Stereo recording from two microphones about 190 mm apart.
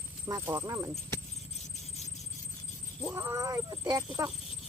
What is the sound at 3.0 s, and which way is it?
Wild animals, 15° right (ahead or behind).